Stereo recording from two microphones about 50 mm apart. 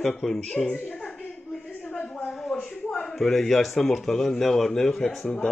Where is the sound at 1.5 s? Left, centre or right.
Centre.